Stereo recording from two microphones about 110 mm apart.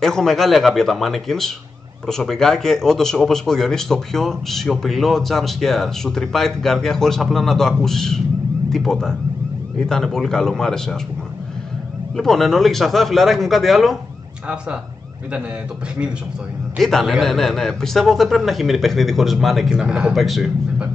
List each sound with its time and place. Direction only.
0.0 s speech: 5° left (ahead or behind)
12.2 s speech: centre (ahead or behind)
16.7 s speech: centre (ahead or behind)